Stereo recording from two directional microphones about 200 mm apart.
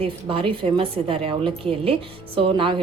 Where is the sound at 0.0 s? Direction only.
25° right (ahead or behind).